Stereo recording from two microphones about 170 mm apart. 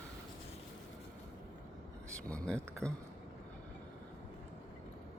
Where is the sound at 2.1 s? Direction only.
5° left (ahead or behind).